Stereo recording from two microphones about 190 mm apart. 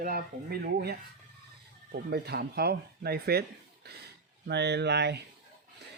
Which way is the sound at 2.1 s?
55° right (ahead or behind).